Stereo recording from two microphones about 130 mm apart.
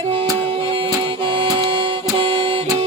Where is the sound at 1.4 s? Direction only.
40° right (ahead or behind).